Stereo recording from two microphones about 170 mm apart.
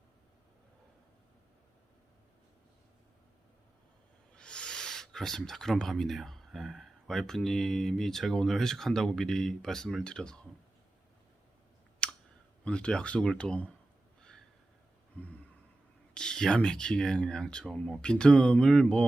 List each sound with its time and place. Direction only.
4.4 s speech: 5° left (ahead or behind)
12.0 s clicking: 5° left (ahead or behind)
12.6 s speech: 5° left (ahead or behind)
14.2 s a sound: 5° left (ahead or behind)
16.1 s speech: 5° left (ahead or behind)